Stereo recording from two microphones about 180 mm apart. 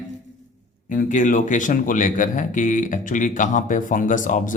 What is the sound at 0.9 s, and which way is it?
Speech, 45° left (ahead or behind).